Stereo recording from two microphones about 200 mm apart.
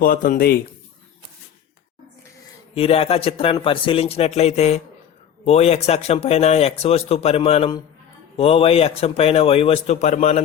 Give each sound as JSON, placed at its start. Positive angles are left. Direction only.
{"t": 0.0, "sound": "a man's voice", "side_deg": 45}
{"t": 2.7, "sound": "a man's voice", "side_deg": 30}